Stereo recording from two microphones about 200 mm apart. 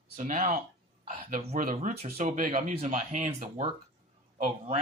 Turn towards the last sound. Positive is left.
turn(degrees=-35)  # may be behind; listen again after turning